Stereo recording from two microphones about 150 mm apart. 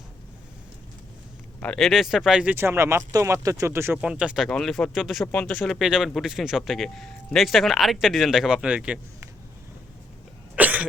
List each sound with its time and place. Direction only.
1.6 s speech: 5° left (ahead or behind)
4.4 s a man's voice: 5° left (ahead or behind)
5.2 s speech: 10° left (ahead or behind)
5.8 s a man's voice: 5° right (ahead or behind)
10.5 s cough: 10° right (ahead or behind)